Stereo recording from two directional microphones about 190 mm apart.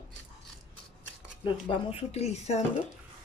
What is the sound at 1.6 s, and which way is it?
Speech, 30° left (ahead or behind).